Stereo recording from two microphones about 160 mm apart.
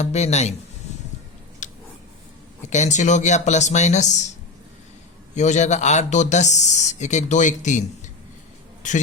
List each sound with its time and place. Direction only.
0.0 s speech: 45° left (ahead or behind)
1.6 s a sound: 50° left (ahead or behind)
2.6 s speech: 45° left (ahead or behind)
5.3 s speech: 45° left (ahead or behind)